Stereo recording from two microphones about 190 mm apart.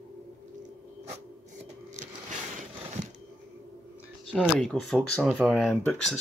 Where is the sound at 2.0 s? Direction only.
40° right (ahead or behind).